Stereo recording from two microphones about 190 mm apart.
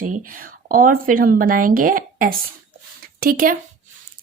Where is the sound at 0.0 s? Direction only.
45° right (ahead or behind).